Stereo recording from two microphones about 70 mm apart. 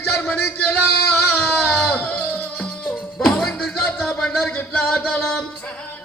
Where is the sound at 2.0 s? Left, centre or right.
Left.